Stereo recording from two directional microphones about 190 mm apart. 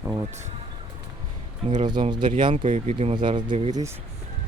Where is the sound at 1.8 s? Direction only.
25° right (ahead or behind).